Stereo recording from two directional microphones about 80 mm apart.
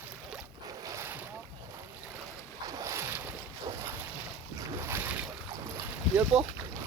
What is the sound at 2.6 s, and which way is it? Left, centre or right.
Boat, right.